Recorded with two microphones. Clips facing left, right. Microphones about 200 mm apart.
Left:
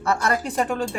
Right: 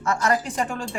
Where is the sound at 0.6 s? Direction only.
35° left (ahead or behind).